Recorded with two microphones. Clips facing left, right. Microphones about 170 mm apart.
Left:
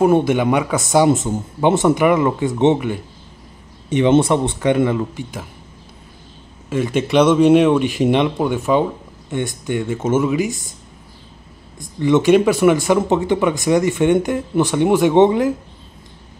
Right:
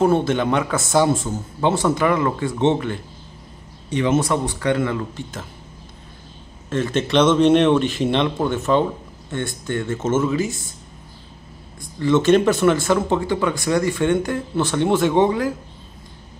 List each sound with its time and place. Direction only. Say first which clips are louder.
0.0 s speech: left 3 dB; 15° left (ahead or behind)
6.7 s speech: left 2 dB; 10° left (ahead or behind)
12.0 s speech: left 2 dB; 15° left (ahead or behind)